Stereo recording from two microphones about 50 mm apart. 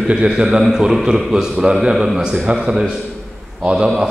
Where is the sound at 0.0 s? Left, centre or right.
Centre.